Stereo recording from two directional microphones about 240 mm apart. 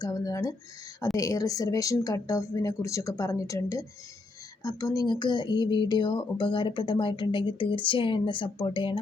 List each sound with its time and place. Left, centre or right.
0.0 s speech: centre